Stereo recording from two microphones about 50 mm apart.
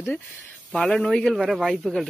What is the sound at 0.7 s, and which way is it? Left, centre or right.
Speech, centre.